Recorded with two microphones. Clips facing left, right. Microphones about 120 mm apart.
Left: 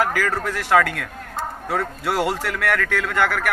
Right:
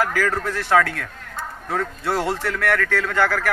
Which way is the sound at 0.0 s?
15° left (ahead or behind).